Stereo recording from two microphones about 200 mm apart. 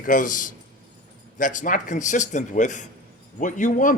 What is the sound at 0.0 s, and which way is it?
A man's voice, 40° left (ahead or behind).